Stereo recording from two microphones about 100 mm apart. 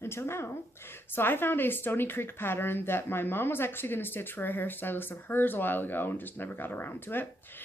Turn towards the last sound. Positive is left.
turn(degrees=20)  # may be behind; listen again after turning